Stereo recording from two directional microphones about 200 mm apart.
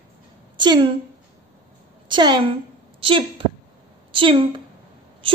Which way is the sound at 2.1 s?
25° right (ahead or behind).